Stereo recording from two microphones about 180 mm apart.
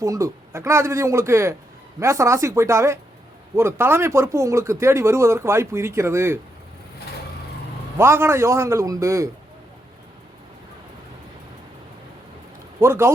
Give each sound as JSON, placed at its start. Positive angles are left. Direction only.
{"t": 0.0, "sound": "speech", "side_deg": -15}
{"t": 7.9, "sound": "speech", "side_deg": -15}
{"t": 12.8, "sound": "speech", "side_deg": -15}